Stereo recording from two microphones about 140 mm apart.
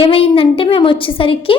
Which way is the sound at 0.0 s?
40° left (ahead or behind).